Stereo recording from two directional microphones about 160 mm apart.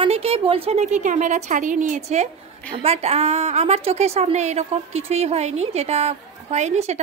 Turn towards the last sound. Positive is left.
turn(degrees=-45)  # may be behind; listen again after turning